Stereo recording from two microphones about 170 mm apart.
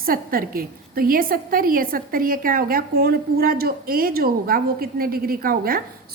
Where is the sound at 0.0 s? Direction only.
60° right (ahead or behind).